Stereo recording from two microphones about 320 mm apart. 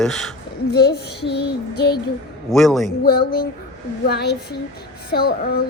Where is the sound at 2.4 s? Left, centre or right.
Centre.